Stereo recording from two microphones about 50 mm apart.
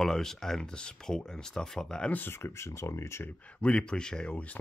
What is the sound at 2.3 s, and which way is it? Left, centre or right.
Speech, left.